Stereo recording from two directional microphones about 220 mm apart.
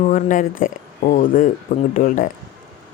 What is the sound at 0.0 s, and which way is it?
Speech, 35° left (ahead or behind).